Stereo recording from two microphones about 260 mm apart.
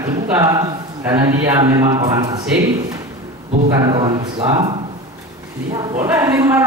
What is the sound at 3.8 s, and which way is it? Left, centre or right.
Speech, centre.